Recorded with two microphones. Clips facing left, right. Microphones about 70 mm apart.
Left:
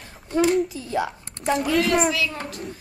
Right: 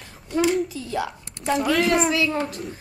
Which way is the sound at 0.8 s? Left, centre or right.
Centre.